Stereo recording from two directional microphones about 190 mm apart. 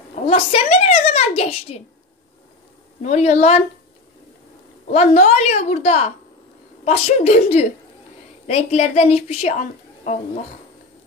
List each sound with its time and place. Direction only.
0.3 s a woman's voice: 30° left (ahead or behind)
3.0 s a woman's voice: 35° left (ahead or behind)
4.8 s a woman's voice: 35° left (ahead or behind)
8.5 s a woman's voice: 35° left (ahead or behind)